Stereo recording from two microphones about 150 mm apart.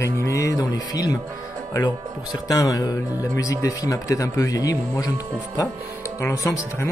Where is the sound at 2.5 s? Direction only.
20° left (ahead or behind).